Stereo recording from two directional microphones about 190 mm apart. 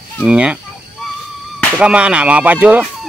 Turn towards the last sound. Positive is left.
turn(degrees=-5)  # may be behind; listen again after turning